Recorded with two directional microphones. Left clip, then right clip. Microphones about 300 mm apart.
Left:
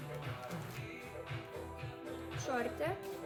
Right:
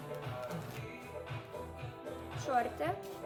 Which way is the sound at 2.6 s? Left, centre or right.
Centre.